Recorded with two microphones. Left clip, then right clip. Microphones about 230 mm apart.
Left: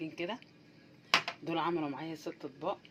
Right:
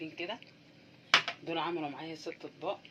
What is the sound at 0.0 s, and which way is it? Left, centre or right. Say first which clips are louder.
Speech: left 1 dB; left.